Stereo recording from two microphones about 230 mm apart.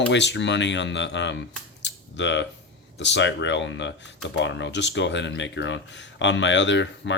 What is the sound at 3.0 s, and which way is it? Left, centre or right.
Speech, left.